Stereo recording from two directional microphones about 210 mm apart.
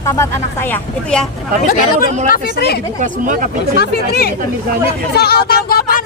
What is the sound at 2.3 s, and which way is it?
Speech, 50° left (ahead or behind).